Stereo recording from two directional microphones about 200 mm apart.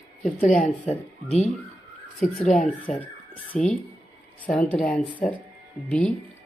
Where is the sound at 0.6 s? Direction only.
35° left (ahead or behind).